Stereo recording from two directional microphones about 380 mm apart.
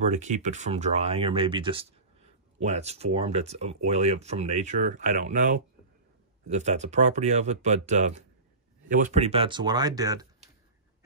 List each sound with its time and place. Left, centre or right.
0.0 s speech: centre